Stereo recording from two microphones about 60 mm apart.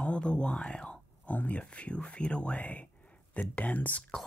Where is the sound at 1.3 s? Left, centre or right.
Left.